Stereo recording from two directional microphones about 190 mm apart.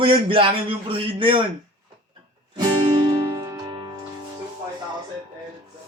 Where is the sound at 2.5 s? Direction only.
25° right (ahead or behind).